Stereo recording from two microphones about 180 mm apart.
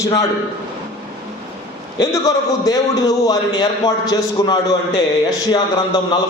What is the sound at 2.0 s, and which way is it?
A man's voice, 20° left (ahead or behind).